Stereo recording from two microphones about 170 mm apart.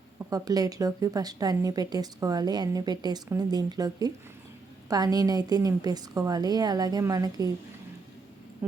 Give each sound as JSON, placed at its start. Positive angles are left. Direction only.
{"t": 0.2, "sound": "speech", "side_deg": -20}